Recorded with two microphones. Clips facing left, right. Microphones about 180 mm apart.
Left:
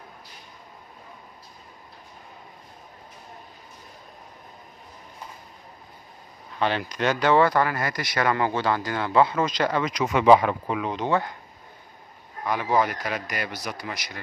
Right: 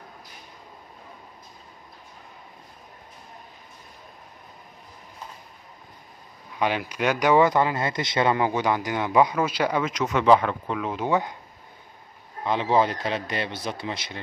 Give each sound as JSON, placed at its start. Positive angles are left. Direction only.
{"t": 6.6, "sound": "speech", "side_deg": -10}
{"t": 11.1, "sound": "speech", "side_deg": -15}
{"t": 12.4, "sound": "speech", "side_deg": -25}